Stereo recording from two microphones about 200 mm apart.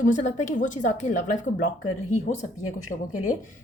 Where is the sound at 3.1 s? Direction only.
90° left.